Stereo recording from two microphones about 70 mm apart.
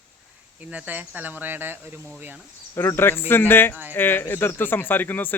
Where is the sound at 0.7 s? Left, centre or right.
Right.